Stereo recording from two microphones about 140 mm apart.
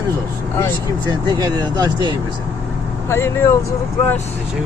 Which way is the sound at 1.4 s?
30° right (ahead or behind).